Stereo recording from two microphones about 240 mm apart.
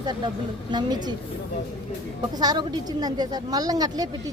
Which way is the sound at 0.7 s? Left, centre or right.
Centre.